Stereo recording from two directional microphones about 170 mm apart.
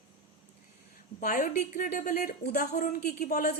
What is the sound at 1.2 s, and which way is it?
A woman's voice, 50° left (ahead or behind).